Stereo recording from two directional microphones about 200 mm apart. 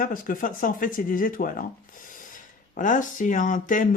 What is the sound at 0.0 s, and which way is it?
Speech, 45° left (ahead or behind).